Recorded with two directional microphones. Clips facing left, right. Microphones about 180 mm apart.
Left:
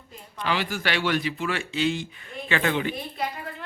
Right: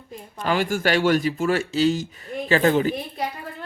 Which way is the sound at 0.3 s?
45° right (ahead or behind).